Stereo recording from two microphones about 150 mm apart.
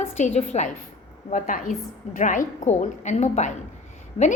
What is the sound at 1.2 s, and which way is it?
A woman's voice, 60° left (ahead or behind).